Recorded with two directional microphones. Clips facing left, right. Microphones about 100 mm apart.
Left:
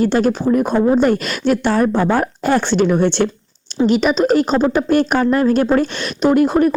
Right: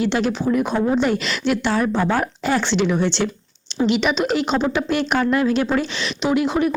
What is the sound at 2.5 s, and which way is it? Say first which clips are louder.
Speech: left 5 dB; 45° left (ahead or behind).